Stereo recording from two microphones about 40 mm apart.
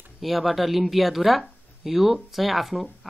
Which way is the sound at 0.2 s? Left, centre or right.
Centre.